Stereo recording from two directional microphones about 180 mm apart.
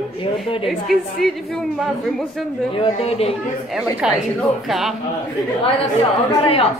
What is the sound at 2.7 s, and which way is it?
Speech, 30° left (ahead or behind).